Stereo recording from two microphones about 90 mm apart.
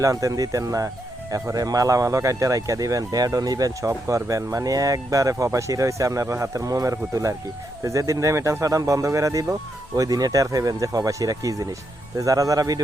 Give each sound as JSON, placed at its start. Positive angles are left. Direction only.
{"t": 0.0, "sound": "speech", "side_deg": -40}